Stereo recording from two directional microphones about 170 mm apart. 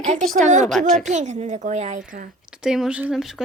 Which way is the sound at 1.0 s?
45° right (ahead or behind).